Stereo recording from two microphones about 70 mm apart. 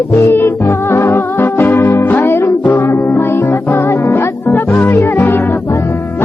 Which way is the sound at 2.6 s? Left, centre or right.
Left.